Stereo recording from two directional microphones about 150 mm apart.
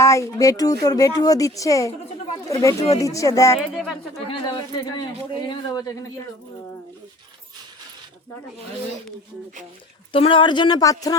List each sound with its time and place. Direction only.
0.0 s speech: 20° left (ahead or behind)
3.8 s speech: centre (ahead or behind)
4.3 s speech: 30° left (ahead or behind)
10.1 s speech: 35° left (ahead or behind)